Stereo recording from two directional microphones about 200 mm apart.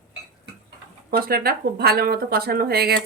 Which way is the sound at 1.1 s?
50° right (ahead or behind).